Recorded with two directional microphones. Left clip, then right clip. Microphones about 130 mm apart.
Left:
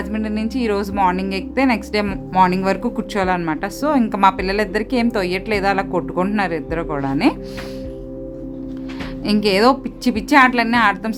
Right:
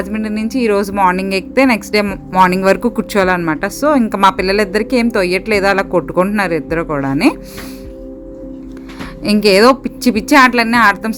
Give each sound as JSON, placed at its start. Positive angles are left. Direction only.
{"t": 0.0, "sound": "a woman's voice", "side_deg": -25}
{"t": 2.0, "sound": "speech", "side_deg": -20}
{"t": 2.5, "sound": "a woman's voice", "side_deg": -30}
{"t": 9.2, "sound": "a woman's voice", "side_deg": -30}